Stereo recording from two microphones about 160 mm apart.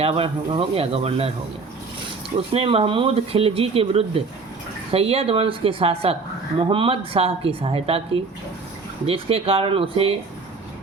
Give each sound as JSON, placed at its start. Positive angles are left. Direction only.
{"t": 0.0, "sound": "a woman's voice", "side_deg": -35}
{"t": 2.5, "sound": "a woman's voice", "side_deg": -35}